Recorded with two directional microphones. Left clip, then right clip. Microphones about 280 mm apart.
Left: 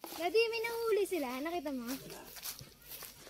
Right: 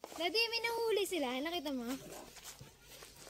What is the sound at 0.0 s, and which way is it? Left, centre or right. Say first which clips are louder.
Speech: left 3 dB; centre.